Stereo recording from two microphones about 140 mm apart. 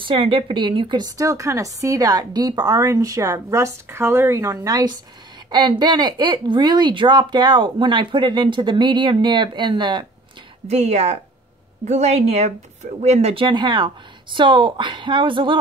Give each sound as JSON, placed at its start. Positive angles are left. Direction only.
{"t": 0.0, "sound": "a woman's voice", "side_deg": -35}
{"t": 10.7, "sound": "speech", "side_deg": -50}